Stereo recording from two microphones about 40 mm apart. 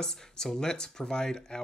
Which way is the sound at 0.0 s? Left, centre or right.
Centre.